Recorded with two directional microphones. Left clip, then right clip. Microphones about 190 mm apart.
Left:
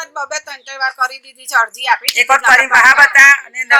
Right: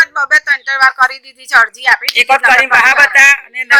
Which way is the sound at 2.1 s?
70° right (ahead or behind).